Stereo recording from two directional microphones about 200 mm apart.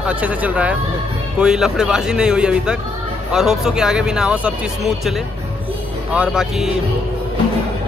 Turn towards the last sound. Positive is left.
turn(degrees=-5)  # may be behind; listen again after turning